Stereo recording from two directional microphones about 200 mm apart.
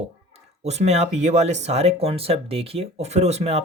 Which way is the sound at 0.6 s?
35° right (ahead or behind).